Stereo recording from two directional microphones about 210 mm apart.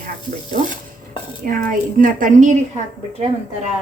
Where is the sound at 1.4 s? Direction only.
40° right (ahead or behind).